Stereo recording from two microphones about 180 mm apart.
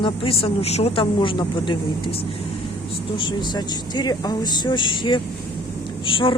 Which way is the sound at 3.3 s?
25° left (ahead or behind).